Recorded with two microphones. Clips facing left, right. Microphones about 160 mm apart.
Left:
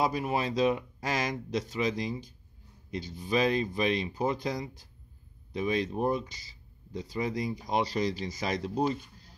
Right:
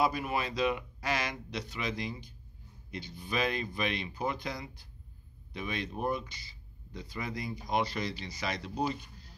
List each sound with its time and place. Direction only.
0.0 s speech: 35° left (ahead or behind)